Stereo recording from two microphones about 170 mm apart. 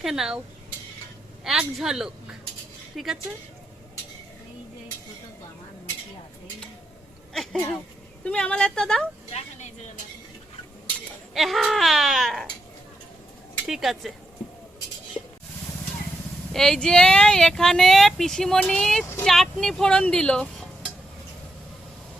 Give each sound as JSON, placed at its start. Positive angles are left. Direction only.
{"t": 0.0, "sound": "speech", "side_deg": 0}
{"t": 1.5, "sound": "speech", "side_deg": -5}
{"t": 8.2, "sound": "speech", "side_deg": 5}
{"t": 9.3, "sound": "a sound", "side_deg": 45}
{"t": 11.3, "sound": "speech", "side_deg": 0}
{"t": 13.7, "sound": "speech", "side_deg": 0}
{"t": 16.5, "sound": "speech", "side_deg": 0}